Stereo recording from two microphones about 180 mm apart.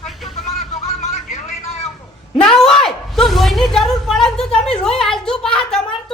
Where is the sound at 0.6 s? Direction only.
40° left (ahead or behind).